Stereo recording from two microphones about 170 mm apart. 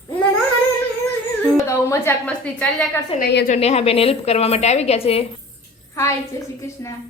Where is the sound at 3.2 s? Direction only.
75° left (ahead or behind).